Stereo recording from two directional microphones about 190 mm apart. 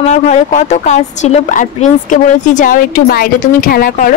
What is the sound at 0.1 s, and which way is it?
A woman's voice, 40° left (ahead or behind).